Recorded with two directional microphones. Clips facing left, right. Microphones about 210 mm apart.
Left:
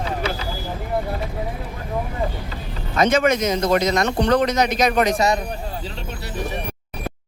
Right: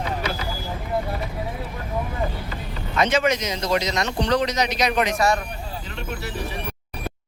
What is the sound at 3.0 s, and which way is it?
A man's voice, 50° left (ahead or behind).